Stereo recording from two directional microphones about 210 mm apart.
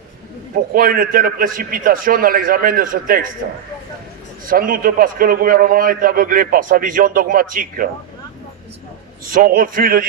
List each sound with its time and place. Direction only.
0.5 s a man's voice: 45° right (ahead or behind)
4.4 s a man's voice: 40° right (ahead or behind)
9.3 s a man's voice: 40° right (ahead or behind)